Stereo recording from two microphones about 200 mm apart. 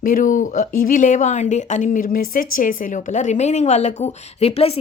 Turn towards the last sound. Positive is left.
turn(degrees=30)  # may be behind; listen again after turning